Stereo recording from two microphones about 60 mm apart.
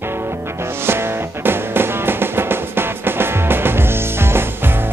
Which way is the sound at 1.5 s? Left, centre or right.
Right.